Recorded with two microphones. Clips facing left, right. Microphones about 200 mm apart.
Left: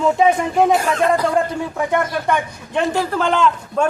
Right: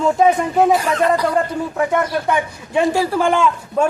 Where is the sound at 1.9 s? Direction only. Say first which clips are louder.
Right 1 dB; 5° right (ahead or behind).